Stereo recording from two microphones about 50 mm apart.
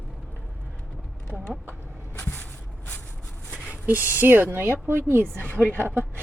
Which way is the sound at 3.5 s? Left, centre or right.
Right.